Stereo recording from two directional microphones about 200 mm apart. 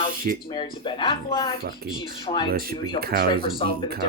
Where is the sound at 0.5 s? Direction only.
20° left (ahead or behind).